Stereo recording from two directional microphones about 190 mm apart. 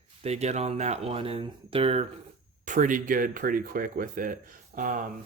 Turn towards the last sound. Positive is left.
turn(degrees=-45)  # may be behind; listen again after turning